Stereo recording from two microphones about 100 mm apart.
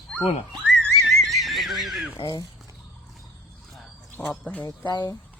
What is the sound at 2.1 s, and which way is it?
Speech, 45° left (ahead or behind).